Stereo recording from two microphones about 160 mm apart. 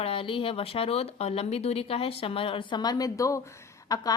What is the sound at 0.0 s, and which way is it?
A woman's voice, 35° left (ahead or behind).